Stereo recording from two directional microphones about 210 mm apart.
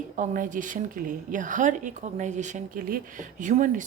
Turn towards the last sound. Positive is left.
turn(degrees=-35)  # may be behind; listen again after turning